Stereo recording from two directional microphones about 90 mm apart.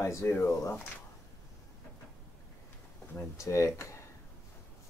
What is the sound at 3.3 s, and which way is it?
Speech, 35° left (ahead or behind).